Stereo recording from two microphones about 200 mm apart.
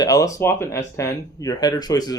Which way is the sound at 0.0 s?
15° left (ahead or behind).